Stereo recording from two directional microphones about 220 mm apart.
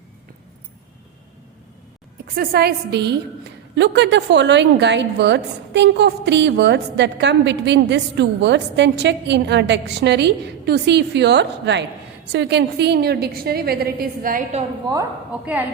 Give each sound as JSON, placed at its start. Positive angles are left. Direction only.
{"t": 2.2, "sound": "a woman's voice", "side_deg": -45}
{"t": 14.8, "sound": "a woman's voice", "side_deg": -10}